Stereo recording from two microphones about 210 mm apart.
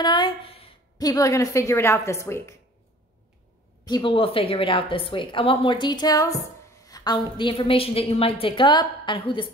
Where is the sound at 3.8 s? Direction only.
20° left (ahead or behind).